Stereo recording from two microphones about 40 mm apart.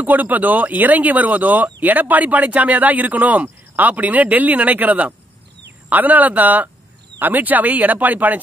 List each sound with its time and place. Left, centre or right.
0.0 s speech: right